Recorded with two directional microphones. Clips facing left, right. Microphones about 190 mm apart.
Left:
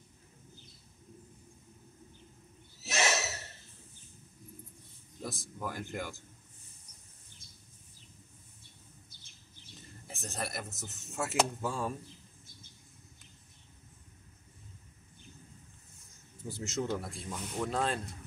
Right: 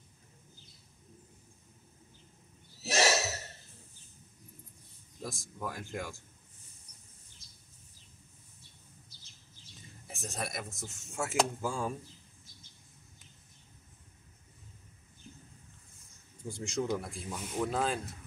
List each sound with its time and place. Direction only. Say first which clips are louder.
2.8 s a sound: right 4 dB; 35° right (ahead or behind)
5.2 s speech: even; centre (ahead or behind)
10.0 s speech: even; centre (ahead or behind)
16.4 s speech: right 1 dB; centre (ahead or behind)